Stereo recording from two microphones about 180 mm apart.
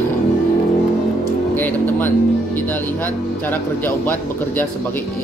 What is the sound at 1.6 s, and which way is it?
Speech, 10° left (ahead or behind).